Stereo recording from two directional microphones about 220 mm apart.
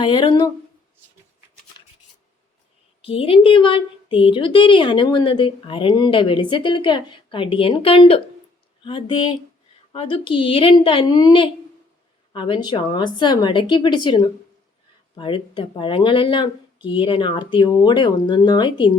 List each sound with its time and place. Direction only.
0.0 s a woman's voice: 20° left (ahead or behind)
3.0 s a woman's voice: 25° left (ahead or behind)